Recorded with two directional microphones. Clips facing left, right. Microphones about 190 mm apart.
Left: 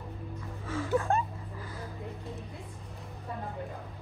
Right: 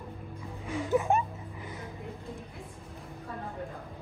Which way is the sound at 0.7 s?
15° right (ahead or behind).